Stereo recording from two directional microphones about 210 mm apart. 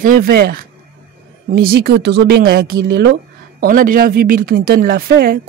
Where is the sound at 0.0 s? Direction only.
45° right (ahead or behind).